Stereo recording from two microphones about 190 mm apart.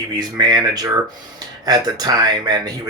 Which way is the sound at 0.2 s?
20° right (ahead or behind).